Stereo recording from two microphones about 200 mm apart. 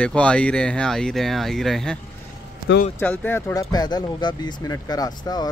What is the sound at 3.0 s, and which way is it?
Speech, 10° left (ahead or behind).